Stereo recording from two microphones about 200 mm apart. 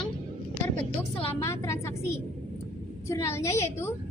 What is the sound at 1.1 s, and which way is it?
Speech, 25° left (ahead or behind).